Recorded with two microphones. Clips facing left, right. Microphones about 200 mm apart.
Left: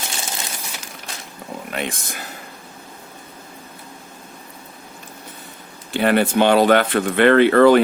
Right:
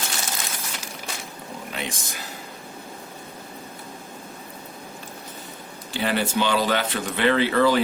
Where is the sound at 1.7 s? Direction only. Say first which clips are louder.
Left 6 dB; 55° left (ahead or behind).